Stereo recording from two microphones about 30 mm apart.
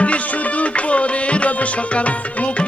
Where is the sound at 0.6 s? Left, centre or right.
Left.